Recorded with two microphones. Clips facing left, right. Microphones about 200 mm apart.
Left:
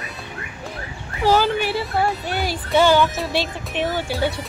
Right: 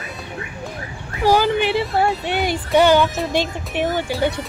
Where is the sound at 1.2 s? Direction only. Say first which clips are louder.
Right 2 dB; 15° right (ahead or behind).